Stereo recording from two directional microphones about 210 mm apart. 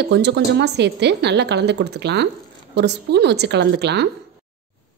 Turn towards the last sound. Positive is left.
turn(degrees=-55)  # may be behind; listen again after turning